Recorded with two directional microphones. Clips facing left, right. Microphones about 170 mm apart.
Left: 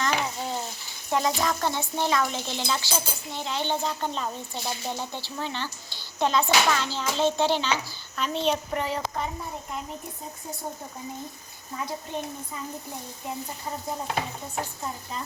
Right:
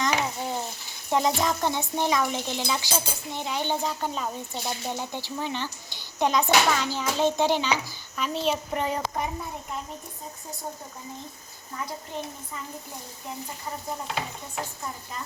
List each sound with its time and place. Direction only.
0.0 s frying: 15° right (ahead or behind)
1.1 s speech: 20° right (ahead or behind); by 8.5 s 5° right (ahead or behind)
8.7 s speech: 15° right (ahead or behind)